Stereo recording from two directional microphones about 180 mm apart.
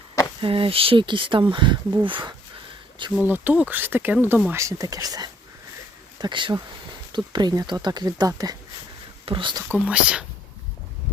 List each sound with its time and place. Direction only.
0.4 s speech: 30° right (ahead or behind)
3.2 s speech: 10° right (ahead or behind)
9.6 s speech: 10° right (ahead or behind)